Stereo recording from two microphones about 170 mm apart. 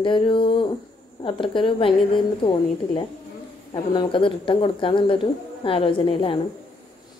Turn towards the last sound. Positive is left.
turn(degrees=30)  # may be behind; listen again after turning